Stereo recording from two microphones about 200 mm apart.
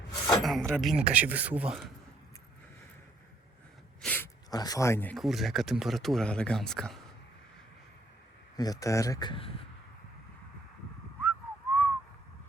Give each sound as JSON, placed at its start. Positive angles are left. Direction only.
{"t": 0.4, "sound": "speech", "side_deg": 0}
{"t": 4.0, "sound": "a sound", "side_deg": 5}
{"t": 4.5, "sound": "speech", "side_deg": 20}
{"t": 8.5, "sound": "speech", "side_deg": 20}
{"t": 11.2, "sound": "whistling", "side_deg": 10}